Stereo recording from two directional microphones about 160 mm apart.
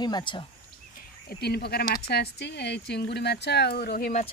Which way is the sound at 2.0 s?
90° left.